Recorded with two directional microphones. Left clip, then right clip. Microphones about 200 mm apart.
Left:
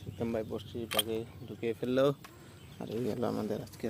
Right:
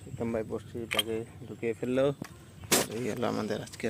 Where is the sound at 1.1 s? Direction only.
10° right (ahead or behind).